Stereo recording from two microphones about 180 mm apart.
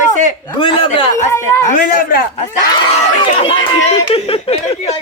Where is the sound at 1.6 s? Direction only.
45° left (ahead or behind).